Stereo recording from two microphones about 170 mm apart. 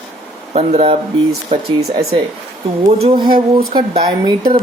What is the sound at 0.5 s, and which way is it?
Speech, 40° right (ahead or behind).